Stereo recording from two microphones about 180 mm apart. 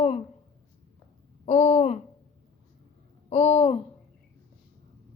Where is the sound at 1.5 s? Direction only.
45° left (ahead or behind).